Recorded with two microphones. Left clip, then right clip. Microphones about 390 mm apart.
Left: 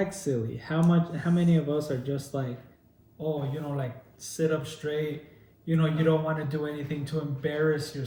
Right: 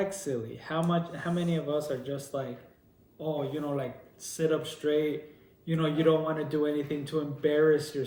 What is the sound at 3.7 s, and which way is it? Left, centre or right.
A man's voice, centre.